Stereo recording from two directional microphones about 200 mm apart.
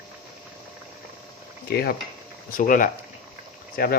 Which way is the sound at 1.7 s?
50° left (ahead or behind).